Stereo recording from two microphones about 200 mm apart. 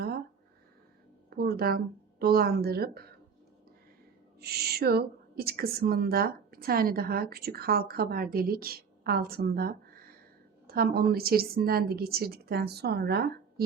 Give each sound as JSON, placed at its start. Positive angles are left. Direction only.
{"t": 1.3, "sound": "speech", "side_deg": -50}
{"t": 4.4, "sound": "speech", "side_deg": -50}